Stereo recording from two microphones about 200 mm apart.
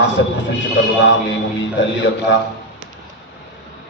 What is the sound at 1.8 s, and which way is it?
Mantra, 65° left (ahead or behind).